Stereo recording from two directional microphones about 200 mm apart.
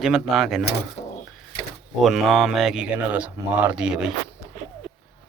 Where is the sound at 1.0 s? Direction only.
35° left (ahead or behind).